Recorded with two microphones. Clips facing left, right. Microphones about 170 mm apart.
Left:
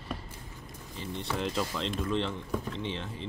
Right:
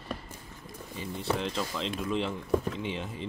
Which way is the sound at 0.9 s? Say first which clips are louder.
Right 3 dB; 5° right (ahead or behind).